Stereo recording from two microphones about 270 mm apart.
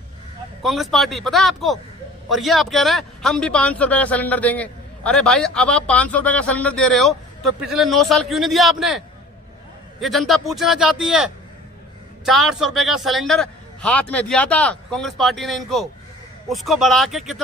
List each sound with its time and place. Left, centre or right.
0.6 s a man's voice: centre